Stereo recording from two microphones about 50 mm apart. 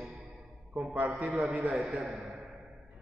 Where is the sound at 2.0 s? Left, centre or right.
Centre.